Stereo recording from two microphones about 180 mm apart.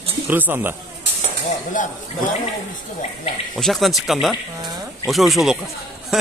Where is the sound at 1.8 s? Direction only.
45° left (ahead or behind).